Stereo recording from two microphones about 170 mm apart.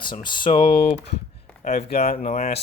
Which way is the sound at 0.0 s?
25° left (ahead or behind).